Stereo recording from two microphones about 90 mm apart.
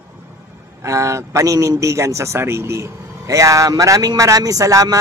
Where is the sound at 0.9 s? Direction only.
35° right (ahead or behind).